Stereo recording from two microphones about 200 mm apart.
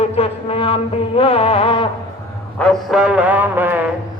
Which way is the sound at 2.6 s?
Centre (ahead or behind).